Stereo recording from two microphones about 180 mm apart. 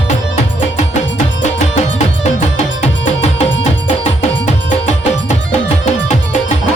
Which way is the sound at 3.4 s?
35° left (ahead or behind).